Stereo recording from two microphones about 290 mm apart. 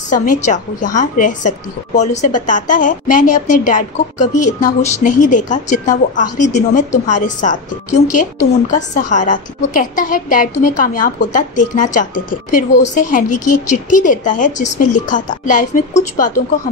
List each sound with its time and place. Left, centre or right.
0.1 s a woman's voice: left